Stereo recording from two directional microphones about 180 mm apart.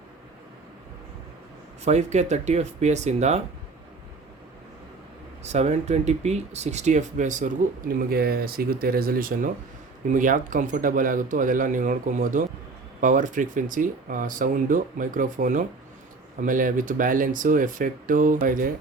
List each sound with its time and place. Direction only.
1.8 s speech: 40° right (ahead or behind)
5.4 s speech: 40° right (ahead or behind)